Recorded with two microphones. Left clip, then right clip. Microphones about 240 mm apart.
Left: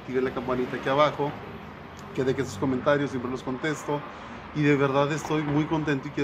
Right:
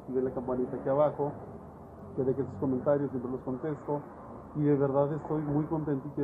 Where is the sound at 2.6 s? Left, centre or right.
Left.